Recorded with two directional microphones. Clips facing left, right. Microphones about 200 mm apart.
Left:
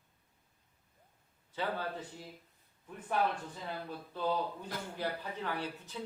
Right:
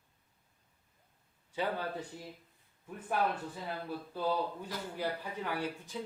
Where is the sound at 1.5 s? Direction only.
15° right (ahead or behind).